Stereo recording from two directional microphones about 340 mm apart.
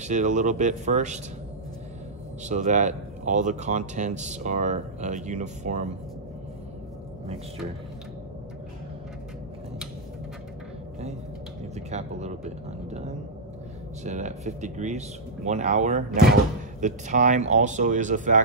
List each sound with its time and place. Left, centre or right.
0.0 s speech: right
2.4 s speech: right
11.7 s speech: centre
14.0 s speech: right